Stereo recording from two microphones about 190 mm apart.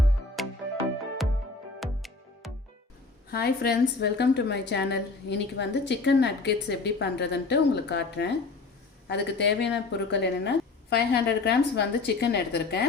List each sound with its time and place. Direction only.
0.4 s music: centre (ahead or behind)
1.8 s music: centre (ahead or behind)
3.2 s a woman's voice: 55° left (ahead or behind)